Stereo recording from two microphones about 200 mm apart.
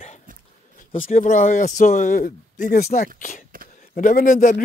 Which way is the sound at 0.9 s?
40° left (ahead or behind).